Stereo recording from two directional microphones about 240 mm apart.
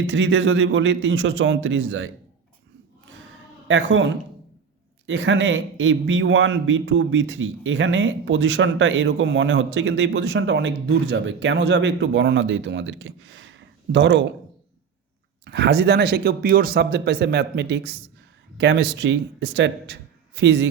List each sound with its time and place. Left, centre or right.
0.1 s speech: right
3.7 s speech: right
15.4 s speech: right